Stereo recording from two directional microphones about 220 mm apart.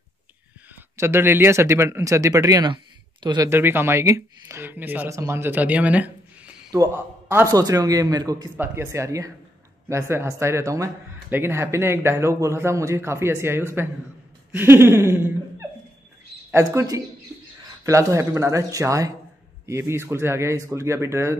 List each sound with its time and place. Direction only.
0.9 s speech: 10° right (ahead or behind)
16.4 s speech: 15° right (ahead or behind)